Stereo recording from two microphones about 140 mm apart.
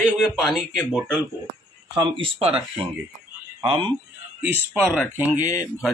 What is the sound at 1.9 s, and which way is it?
Speech, 40° right (ahead or behind).